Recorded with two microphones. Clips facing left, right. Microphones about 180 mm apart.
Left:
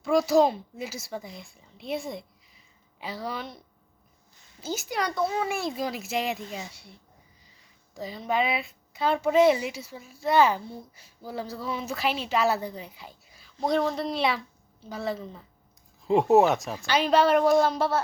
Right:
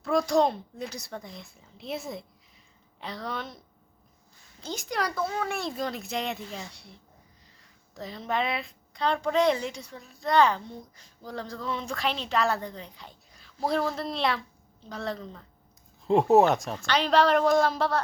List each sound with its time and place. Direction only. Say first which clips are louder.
0.0 s a child's voice: left 3 dB; centre (ahead or behind)
4.6 s speech: left 1 dB; 5° left (ahead or behind)